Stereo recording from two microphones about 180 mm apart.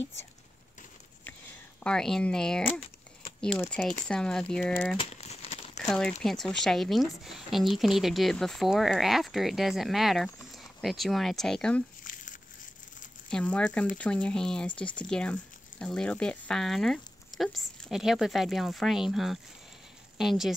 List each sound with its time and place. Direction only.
1.8 s speech: 5° left (ahead or behind)
4.9 s crumpling: 35° left (ahead or behind)
5.8 s speech: 5° left (ahead or behind)
12.0 s crumpling: 45° left (ahead or behind)
13.3 s speech: 5° left (ahead or behind)